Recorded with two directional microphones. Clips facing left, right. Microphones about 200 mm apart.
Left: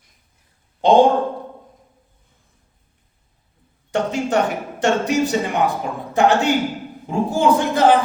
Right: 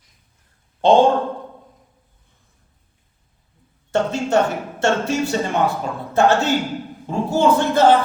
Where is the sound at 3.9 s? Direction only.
15° left (ahead or behind).